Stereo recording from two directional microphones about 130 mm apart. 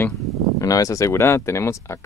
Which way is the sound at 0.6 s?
25° left (ahead or behind).